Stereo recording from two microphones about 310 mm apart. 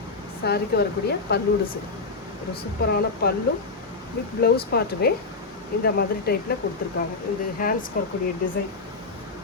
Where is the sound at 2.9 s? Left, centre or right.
Left.